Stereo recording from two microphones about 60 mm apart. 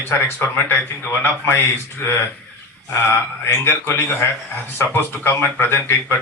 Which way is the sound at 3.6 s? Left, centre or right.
Left.